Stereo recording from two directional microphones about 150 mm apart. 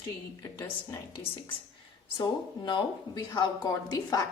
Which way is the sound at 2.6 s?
30° left (ahead or behind).